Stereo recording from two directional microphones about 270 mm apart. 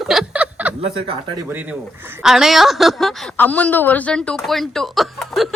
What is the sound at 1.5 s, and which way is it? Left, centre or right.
A woman's voice, centre.